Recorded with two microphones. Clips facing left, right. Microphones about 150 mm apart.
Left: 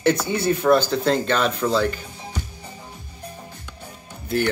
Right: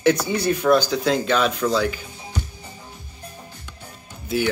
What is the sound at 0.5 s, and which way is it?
Speech, 25° left (ahead or behind).